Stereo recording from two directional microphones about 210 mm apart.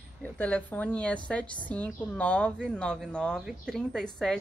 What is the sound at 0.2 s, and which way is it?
A woman's voice, 10° left (ahead or behind).